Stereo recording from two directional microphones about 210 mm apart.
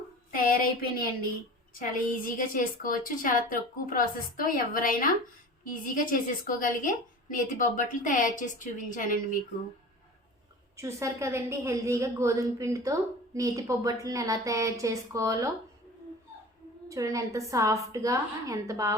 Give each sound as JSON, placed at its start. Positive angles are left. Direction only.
{"t": 0.3, "sound": "a woman's voice", "side_deg": 40}
{"t": 10.8, "sound": "a woman's voice", "side_deg": -15}
{"t": 16.9, "sound": "a woman's voice", "side_deg": -15}